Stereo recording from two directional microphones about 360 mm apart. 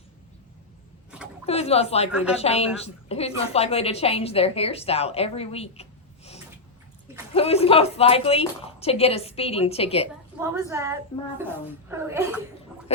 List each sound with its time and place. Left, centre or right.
1.5 s a woman's voice: centre
10.4 s a woman's voice: centre